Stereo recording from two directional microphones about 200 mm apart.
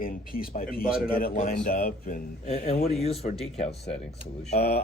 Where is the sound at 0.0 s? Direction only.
45° left (ahead or behind).